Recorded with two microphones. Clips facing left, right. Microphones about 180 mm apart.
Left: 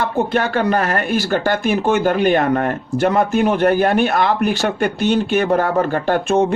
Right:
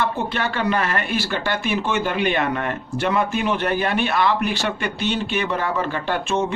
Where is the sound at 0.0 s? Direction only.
45° left (ahead or behind).